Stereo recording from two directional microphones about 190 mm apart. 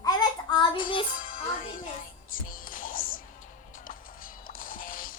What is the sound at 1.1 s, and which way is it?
Music, 45° left (ahead or behind).